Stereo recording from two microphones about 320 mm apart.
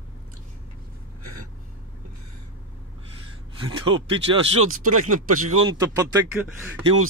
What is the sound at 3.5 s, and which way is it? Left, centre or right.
Speech, centre.